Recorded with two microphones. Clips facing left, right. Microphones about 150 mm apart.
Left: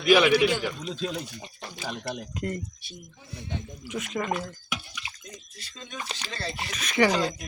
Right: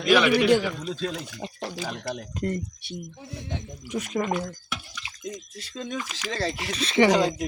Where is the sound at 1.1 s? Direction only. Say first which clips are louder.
Right 1 dB; 90° right.